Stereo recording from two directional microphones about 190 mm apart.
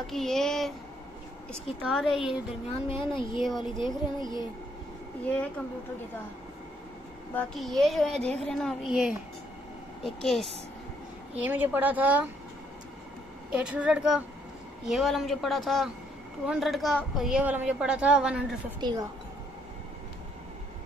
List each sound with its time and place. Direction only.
0.0 s a woman's voice: centre (ahead or behind)
2.7 s speech: 30° left (ahead or behind)
3.4 s a woman's voice: centre (ahead or behind)
4.2 s speech: 20° left (ahead or behind)
7.3 s a woman's voice: centre (ahead or behind)
11.4 s speech: 10° right (ahead or behind)
13.5 s a woman's voice: 5° right (ahead or behind)
18.8 s a woman's voice: 25° right (ahead or behind)